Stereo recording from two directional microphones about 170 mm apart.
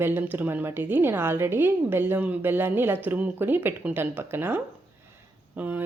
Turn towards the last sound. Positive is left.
turn(degrees=-10)  # may be behind; listen again after turning